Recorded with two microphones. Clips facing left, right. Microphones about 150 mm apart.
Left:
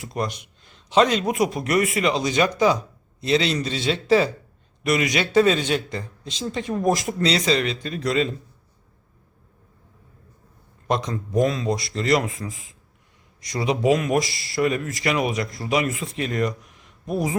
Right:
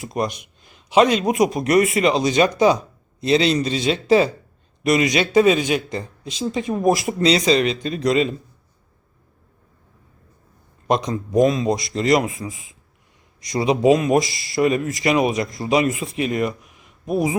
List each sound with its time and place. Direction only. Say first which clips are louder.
0.0 s a man's voice: right 4 dB; 15° right (ahead or behind)
10.8 s speech: right 4 dB; 15° right (ahead or behind)
13.5 s speech: right 4 dB; 20° right (ahead or behind)